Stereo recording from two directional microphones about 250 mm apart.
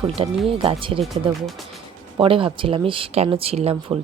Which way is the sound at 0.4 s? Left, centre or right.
Right.